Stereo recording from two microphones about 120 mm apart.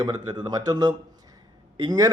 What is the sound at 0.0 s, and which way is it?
Speech, 35° right (ahead or behind).